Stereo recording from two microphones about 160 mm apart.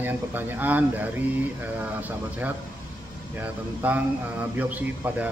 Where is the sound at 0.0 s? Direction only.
10° right (ahead or behind).